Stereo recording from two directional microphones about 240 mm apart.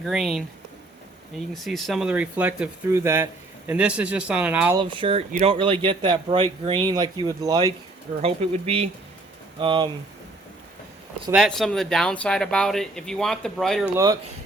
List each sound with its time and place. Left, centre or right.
0.0 s speech: centre
1.5 s speech: centre
4.8 s speech: right
11.3 s speech: centre